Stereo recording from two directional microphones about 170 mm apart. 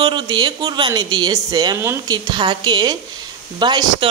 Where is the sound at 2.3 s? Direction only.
25° right (ahead or behind).